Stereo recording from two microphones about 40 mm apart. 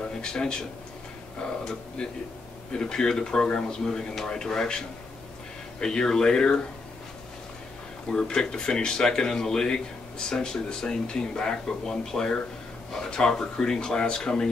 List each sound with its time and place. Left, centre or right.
0.2 s speech: centre
8.1 s speech: left